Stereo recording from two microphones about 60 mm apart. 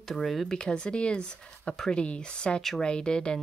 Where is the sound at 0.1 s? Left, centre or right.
Centre.